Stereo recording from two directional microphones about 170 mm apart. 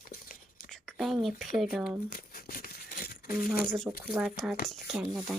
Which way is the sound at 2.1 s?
60° left (ahead or behind).